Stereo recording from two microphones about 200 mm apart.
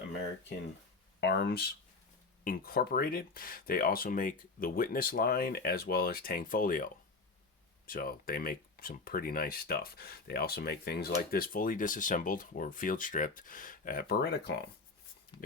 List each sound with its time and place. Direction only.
1.2 s speech: 55° left (ahead or behind)
15.3 s speech: 25° left (ahead or behind)